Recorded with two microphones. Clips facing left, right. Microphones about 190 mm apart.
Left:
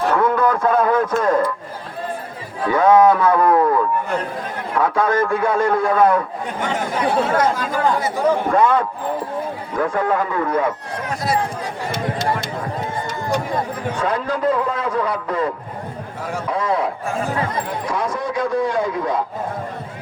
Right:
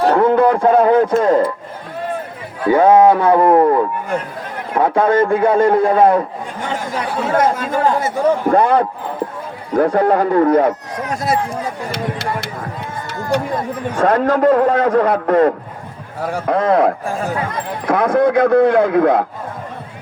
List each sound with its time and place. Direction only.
0.0 s speech: 35° right (ahead or behind)
2.6 s a man's voice: 30° right (ahead or behind)
7.3 s speech: 25° right (ahead or behind)
8.0 s a man's voice: 35° right (ahead or behind)
11.9 s speech: 65° right (ahead or behind)
13.9 s a man's voice: 50° right (ahead or behind)